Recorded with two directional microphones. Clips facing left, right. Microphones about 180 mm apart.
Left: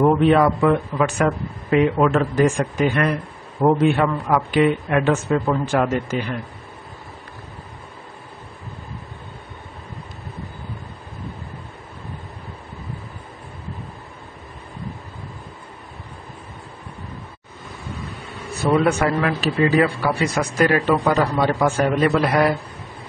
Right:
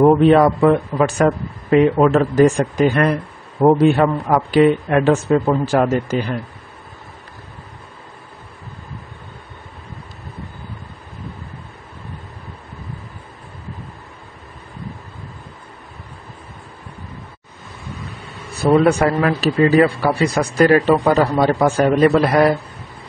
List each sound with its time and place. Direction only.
0.0 s a man's voice: 35° right (ahead or behind)
18.5 s a man's voice: 35° right (ahead or behind)